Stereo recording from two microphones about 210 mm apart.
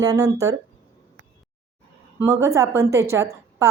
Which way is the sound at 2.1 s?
15° right (ahead or behind).